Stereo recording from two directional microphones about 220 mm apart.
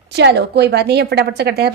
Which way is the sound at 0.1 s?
50° right (ahead or behind).